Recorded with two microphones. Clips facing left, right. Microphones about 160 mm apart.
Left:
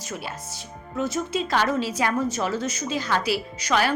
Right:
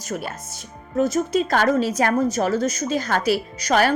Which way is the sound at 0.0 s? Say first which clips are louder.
Right 4 dB; 45° right (ahead or behind).